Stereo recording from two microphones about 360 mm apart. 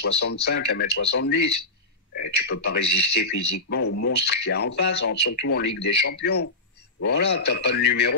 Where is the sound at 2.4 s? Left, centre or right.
Left.